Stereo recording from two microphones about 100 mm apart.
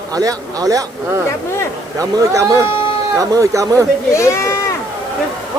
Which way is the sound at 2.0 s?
35° right (ahead or behind).